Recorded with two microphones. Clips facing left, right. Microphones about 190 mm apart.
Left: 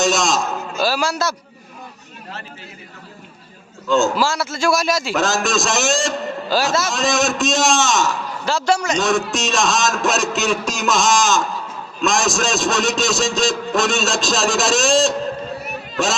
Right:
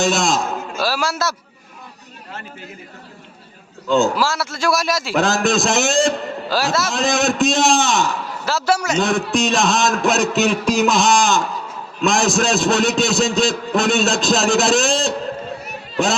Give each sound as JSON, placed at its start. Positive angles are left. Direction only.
{"t": 0.0, "sound": "a man's voice", "side_deg": -55}
{"t": 0.8, "sound": "a man's voice", "side_deg": 0}
{"t": 4.1, "sound": "a man's voice", "side_deg": 0}
{"t": 5.1, "sound": "a man's voice", "side_deg": -60}
{"t": 6.5, "sound": "a man's voice", "side_deg": 0}
{"t": 6.9, "sound": "a man's voice", "side_deg": -55}
{"t": 8.4, "sound": "a man's voice", "side_deg": -5}
{"t": 9.0, "sound": "a man's voice", "side_deg": -55}